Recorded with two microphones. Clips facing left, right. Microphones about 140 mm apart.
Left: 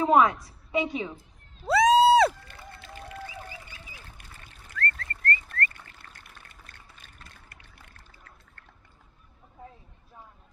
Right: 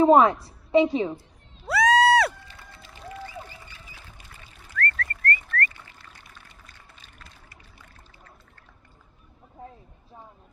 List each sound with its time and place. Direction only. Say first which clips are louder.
0.0 s a woman's voice: right 5 dB; 30° right (ahead or behind)
1.6 s a sound: left 1 dB; 25° left (ahead or behind)
2.4 s music: left 2 dB; 55° left (ahead or behind)
4.8 s bird: right 3 dB; 25° left (ahead or behind)
5.7 s pour: right 1 dB; 55° left (ahead or behind)
7.5 s a sound: right 2 dB; 55° left (ahead or behind)